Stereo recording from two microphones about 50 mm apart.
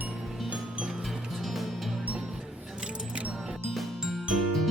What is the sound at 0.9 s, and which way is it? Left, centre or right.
Music, centre.